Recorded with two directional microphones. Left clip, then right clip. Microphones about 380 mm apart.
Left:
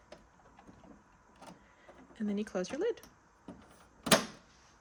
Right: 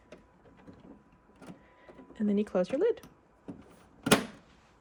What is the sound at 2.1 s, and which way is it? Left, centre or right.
Speech, centre.